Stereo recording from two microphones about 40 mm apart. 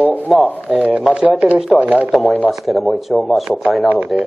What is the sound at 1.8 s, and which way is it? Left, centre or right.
Speech, right.